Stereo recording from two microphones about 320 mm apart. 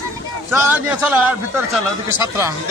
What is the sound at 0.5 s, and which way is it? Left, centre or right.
A man's voice, centre.